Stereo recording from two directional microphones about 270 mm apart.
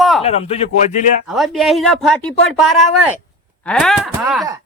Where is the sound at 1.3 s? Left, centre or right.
Centre.